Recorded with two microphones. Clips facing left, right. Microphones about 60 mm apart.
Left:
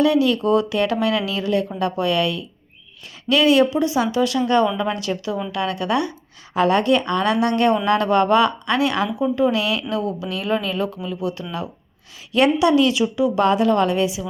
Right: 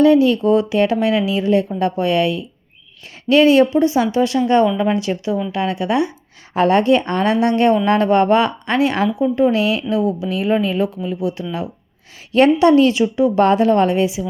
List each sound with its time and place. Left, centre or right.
0.0 s a woman's voice: right
6.5 s speech: right
12.3 s a woman's voice: right